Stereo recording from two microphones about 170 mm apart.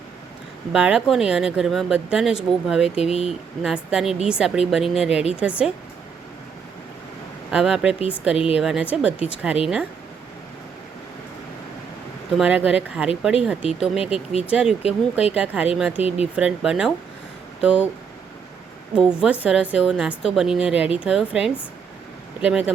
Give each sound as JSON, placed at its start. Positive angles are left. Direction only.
{"t": 0.7, "sound": "speech", "side_deg": -5}
{"t": 3.0, "sound": "speech", "side_deg": 35}
{"t": 3.2, "sound": "speech", "side_deg": 0}
{"t": 7.5, "sound": "speech", "side_deg": -5}
{"t": 12.4, "sound": "speech", "side_deg": -5}
{"t": 14.0, "sound": "speech", "side_deg": 35}
{"t": 14.4, "sound": "speech", "side_deg": -5}
{"t": 18.9, "sound": "speech", "side_deg": -5}